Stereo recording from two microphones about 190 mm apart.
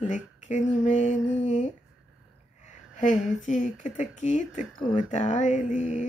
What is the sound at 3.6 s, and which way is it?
Speech, 40° left (ahead or behind).